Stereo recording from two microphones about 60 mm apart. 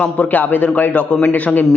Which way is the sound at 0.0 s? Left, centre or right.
Left.